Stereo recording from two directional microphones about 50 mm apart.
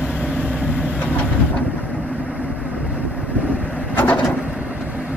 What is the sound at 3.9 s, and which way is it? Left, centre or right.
Bird, left.